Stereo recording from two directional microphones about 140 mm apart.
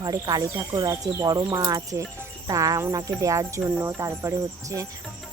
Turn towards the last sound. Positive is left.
turn(degrees=-20)  # may be behind; listen again after turning